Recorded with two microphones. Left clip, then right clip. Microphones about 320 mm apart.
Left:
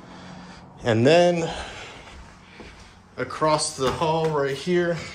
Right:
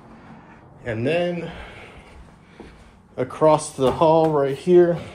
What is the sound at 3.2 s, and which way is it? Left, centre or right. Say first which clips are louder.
Speech: right 5 dB; centre.